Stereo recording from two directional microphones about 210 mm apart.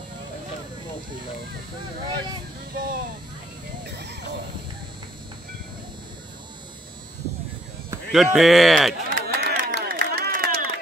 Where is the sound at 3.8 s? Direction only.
55° right (ahead or behind).